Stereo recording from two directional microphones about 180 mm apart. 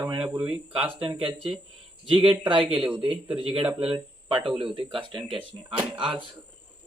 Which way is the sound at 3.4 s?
30° right (ahead or behind).